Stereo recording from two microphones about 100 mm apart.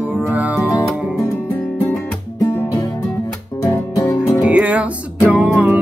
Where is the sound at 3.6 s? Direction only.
30° left (ahead or behind).